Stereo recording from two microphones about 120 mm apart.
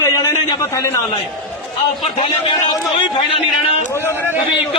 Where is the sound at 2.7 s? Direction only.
40° left (ahead or behind).